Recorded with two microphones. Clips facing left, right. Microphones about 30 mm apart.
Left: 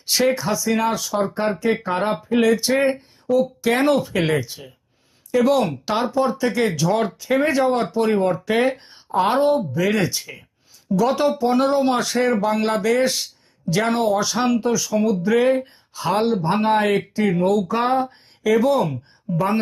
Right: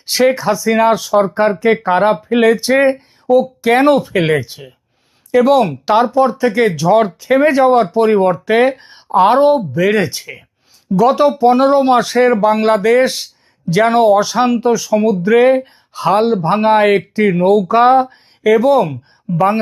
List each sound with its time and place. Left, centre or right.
0.0 s speech: right
5.4 s speech: centre
13.1 s speech: centre
13.7 s speech: centre
18.0 s a sound: centre
18.6 s speech: centre